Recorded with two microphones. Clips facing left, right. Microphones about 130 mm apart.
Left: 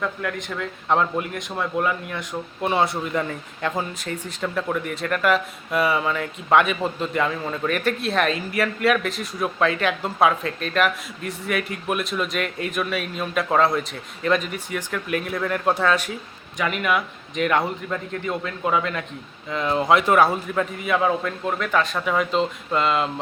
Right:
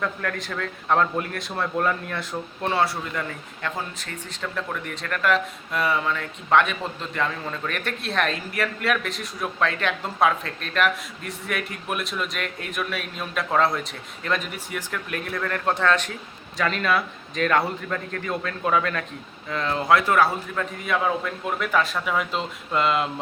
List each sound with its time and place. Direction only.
0.0 s a man's voice: 15° left (ahead or behind)
20.8 s speech: centre (ahead or behind)